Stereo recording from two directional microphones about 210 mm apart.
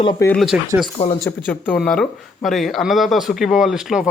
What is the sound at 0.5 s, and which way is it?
Speech, 5° right (ahead or behind).